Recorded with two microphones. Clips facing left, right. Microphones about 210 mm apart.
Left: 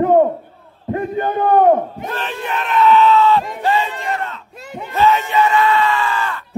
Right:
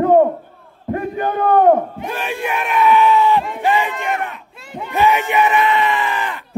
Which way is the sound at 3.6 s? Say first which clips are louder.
Right 1 dB; 15° right (ahead or behind).